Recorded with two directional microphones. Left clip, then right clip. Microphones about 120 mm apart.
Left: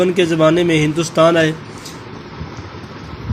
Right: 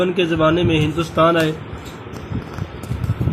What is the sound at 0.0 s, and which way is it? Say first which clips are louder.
A man's voice: left 3 dB; 30° left (ahead or behind).